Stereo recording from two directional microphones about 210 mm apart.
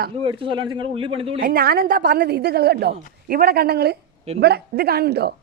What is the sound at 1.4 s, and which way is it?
A woman's voice, 45° right (ahead or behind).